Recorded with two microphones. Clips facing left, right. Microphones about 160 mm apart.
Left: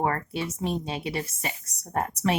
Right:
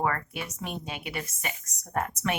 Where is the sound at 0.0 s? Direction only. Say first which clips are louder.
Left 3 dB; 30° left (ahead or behind).